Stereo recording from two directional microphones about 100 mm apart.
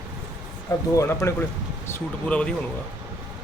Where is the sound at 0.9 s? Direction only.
30° left (ahead or behind).